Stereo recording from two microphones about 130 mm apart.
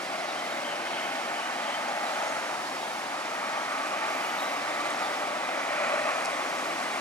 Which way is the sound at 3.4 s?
20° left (ahead or behind).